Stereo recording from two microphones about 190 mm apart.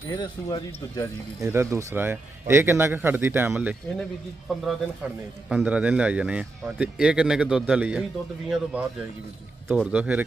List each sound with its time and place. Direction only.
0.1 s speech: 20° left (ahead or behind)
1.4 s speech: 15° right (ahead or behind)